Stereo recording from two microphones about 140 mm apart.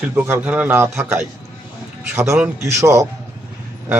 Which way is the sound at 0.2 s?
10° right (ahead or behind).